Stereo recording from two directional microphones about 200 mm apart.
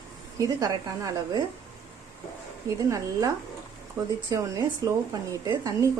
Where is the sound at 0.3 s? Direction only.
15° right (ahead or behind).